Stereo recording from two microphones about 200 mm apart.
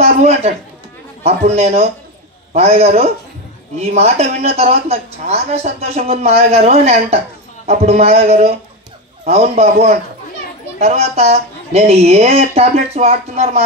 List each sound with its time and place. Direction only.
0.0 s a man's voice: 30° right (ahead or behind)